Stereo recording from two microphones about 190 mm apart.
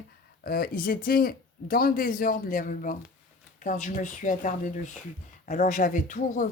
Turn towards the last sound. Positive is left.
turn(degrees=45)  # may be behind; listen again after turning